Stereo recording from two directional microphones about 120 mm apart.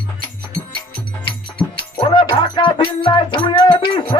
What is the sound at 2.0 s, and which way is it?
Music, 40° left (ahead or behind).